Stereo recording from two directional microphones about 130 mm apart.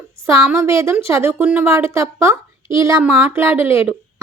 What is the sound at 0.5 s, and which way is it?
A woman's voice, 20° right (ahead or behind).